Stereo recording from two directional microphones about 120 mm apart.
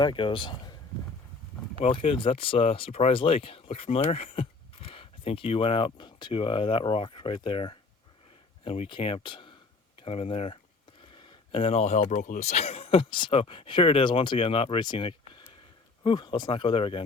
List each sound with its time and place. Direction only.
0.0 s speech: 45° left (ahead or behind)
1.8 s speech: 50° left (ahead or behind)